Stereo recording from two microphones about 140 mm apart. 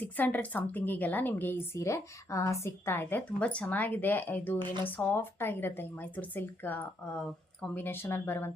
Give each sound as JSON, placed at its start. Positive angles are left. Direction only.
{"t": 0.0, "sound": "a woman's voice", "side_deg": 10}